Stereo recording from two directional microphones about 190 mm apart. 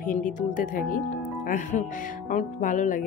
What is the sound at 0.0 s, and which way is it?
Speech, 45° left (ahead or behind).